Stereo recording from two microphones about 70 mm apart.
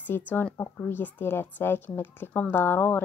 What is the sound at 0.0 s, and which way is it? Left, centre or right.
A woman's voice, left.